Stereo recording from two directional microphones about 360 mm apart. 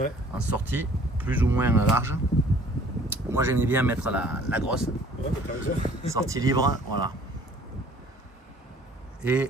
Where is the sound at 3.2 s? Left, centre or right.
Centre.